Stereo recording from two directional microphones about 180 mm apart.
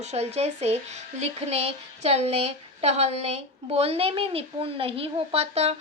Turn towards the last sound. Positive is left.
turn(degrees=-35)  # may be behind; listen again after turning